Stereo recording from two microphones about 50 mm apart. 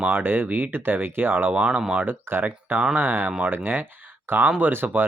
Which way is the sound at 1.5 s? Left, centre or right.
Right.